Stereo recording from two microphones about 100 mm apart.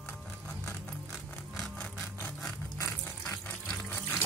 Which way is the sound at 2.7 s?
25° left (ahead or behind).